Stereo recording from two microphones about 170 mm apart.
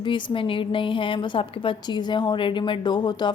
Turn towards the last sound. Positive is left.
turn(degrees=25)  # may be behind; listen again after turning